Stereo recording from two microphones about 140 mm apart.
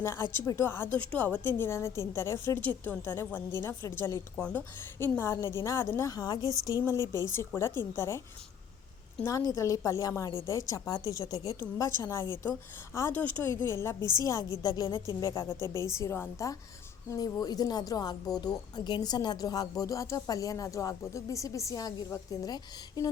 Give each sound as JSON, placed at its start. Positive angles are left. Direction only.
{"t": 0.0, "sound": "a woman's voice", "side_deg": 20}
{"t": 9.2, "sound": "a woman's voice", "side_deg": 25}